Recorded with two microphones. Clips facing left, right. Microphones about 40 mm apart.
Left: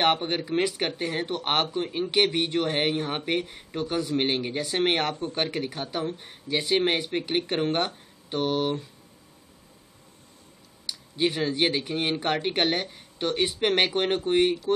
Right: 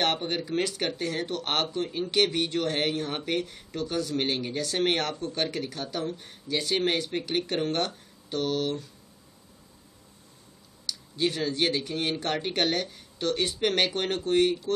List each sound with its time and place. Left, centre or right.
0.0 s speech: centre
10.9 s speech: centre